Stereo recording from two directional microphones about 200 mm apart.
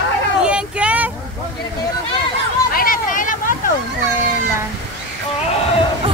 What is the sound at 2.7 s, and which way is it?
Vehicle, 45° left (ahead or behind).